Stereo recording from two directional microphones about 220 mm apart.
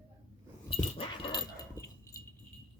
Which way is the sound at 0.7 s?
25° left (ahead or behind).